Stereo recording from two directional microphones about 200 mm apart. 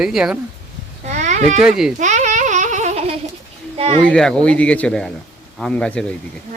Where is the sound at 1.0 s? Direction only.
35° right (ahead or behind).